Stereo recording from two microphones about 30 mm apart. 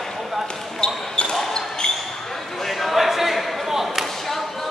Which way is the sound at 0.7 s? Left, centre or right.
Left.